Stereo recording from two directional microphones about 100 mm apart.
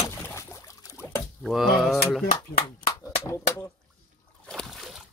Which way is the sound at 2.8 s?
35° left (ahead or behind).